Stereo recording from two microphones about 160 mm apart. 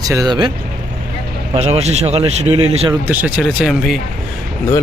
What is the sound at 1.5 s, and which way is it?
Speech, 40° right (ahead or behind).